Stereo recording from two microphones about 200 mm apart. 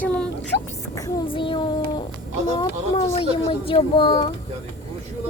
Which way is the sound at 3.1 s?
30° left (ahead or behind).